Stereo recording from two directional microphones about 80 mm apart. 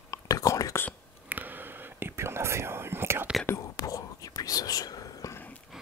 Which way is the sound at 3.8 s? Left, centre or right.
Left.